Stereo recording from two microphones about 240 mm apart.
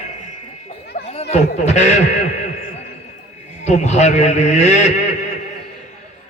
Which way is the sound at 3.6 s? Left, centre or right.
Left.